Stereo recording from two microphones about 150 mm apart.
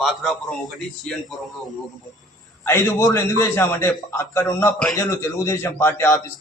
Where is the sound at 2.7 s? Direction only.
15° left (ahead or behind).